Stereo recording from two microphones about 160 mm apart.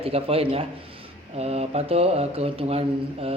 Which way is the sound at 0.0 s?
35° right (ahead or behind).